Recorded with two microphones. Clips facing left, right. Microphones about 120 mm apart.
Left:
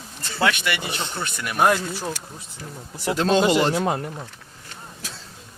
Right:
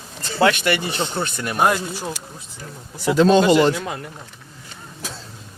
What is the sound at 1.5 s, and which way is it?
Speech, 10° right (ahead or behind).